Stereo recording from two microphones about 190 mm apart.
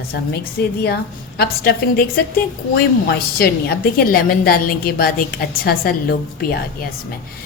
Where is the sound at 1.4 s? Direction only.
50° left (ahead or behind).